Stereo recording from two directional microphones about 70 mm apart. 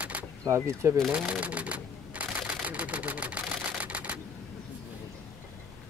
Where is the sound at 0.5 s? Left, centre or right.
Right.